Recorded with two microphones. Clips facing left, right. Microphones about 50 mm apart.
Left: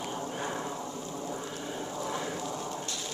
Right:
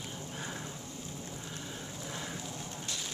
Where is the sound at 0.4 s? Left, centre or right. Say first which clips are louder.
Left 5 dB; centre.